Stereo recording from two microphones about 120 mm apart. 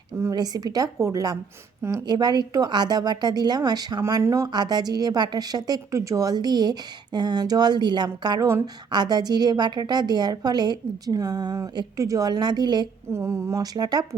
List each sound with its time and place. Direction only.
0.2 s a woman's voice: 30° right (ahead or behind)
13.1 s speech: 25° right (ahead or behind)